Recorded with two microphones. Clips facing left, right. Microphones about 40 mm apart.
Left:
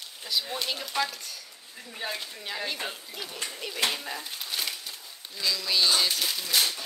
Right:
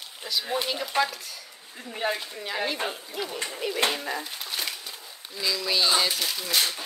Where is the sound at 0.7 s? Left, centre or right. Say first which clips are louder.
Right 4 dB; centre.